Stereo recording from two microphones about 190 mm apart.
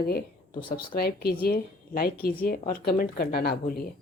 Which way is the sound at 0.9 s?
55° left (ahead or behind).